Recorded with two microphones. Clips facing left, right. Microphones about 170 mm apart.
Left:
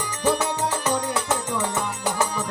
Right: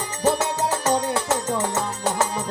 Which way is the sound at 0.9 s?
25° right (ahead or behind).